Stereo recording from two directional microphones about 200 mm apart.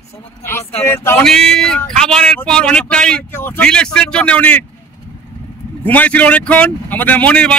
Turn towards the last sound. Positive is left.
turn(degrees=5)  # may be behind; listen again after turning